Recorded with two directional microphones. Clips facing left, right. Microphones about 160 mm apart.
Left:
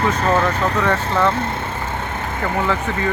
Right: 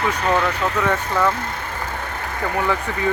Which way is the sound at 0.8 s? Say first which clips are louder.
Left 1 dB; 10° right (ahead or behind).